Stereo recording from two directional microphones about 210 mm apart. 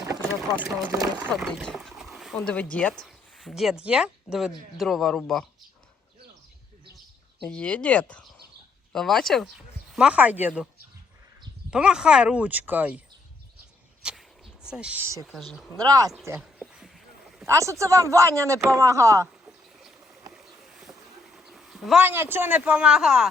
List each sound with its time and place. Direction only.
0.4 s speech: 10° right (ahead or behind)
7.4 s speech: 5° left (ahead or behind)
11.7 s speech: 5° right (ahead or behind)
14.0 s a sound: 5° right (ahead or behind)
14.7 s speech: 5° right (ahead or behind)
15.8 s speech: 15° right (ahead or behind)
16.4 s a sound: 5° right (ahead or behind)
17.4 s speech: 15° right (ahead or behind)
19.5 s rowboat: centre (ahead or behind)
20.3 s a sound: centre (ahead or behind)